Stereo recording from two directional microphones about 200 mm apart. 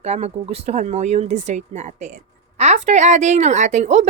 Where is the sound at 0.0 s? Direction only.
30° right (ahead or behind).